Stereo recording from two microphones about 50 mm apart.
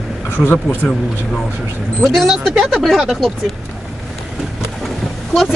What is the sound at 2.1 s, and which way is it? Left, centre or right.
Speech, centre.